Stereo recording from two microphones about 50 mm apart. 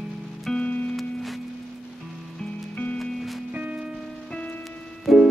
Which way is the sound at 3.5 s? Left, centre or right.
Right.